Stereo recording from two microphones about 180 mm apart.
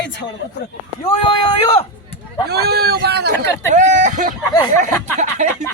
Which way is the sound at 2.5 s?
60° right (ahead or behind).